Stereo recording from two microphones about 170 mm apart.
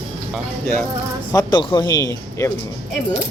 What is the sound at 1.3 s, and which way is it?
Speech, 25° left (ahead or behind).